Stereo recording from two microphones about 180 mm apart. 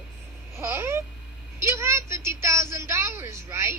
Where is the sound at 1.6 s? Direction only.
15° right (ahead or behind).